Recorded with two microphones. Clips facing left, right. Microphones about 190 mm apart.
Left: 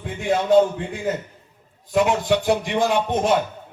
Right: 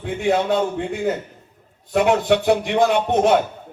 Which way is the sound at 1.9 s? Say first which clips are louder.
Right 2 dB; 60° right (ahead or behind).